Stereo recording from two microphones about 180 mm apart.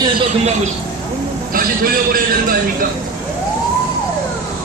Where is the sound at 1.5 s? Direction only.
50° right (ahead or behind).